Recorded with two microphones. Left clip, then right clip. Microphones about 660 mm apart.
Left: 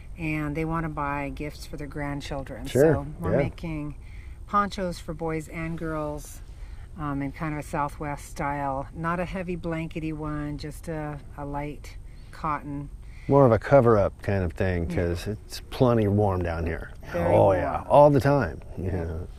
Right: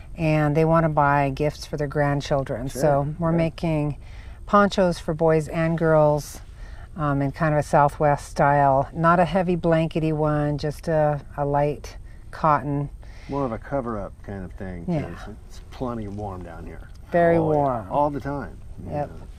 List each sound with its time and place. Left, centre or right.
0.2 s speech: right
6.9 s speech: centre
13.3 s speech: left